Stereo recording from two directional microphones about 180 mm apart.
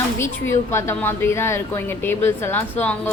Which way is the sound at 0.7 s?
15° left (ahead or behind).